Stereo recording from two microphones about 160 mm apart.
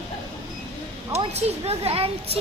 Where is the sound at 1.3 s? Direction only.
40° right (ahead or behind).